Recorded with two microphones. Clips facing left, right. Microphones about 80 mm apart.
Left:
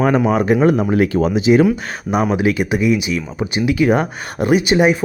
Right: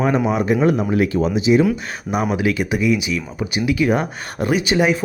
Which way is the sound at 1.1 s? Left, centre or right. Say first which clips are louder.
Left 2 dB; left.